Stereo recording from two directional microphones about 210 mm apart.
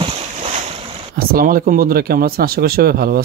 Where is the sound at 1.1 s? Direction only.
45° right (ahead or behind).